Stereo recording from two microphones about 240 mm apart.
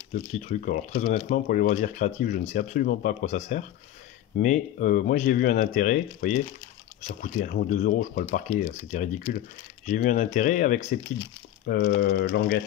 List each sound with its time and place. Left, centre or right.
0.1 s speech: left